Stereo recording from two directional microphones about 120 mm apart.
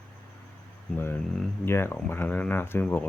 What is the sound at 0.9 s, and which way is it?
Speech, 20° left (ahead or behind).